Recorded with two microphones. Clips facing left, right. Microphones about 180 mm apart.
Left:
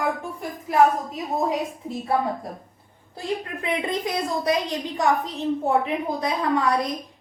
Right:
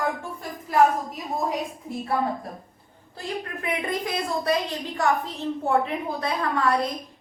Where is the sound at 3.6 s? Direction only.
20° left (ahead or behind).